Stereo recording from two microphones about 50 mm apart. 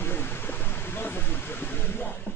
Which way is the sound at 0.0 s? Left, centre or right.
Left.